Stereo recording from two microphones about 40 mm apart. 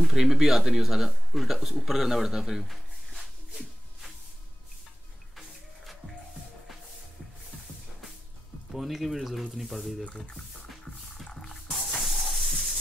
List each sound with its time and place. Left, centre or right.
0.0 s speech: centre
3.2 s shuffle: centre
8.7 s speech: centre
11.2 s music: centre
11.7 s hiss: centre